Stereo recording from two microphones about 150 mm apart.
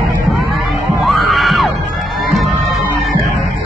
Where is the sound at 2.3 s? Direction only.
Centre (ahead or behind).